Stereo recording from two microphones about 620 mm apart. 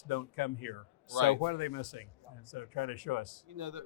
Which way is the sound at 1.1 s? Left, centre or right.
Right.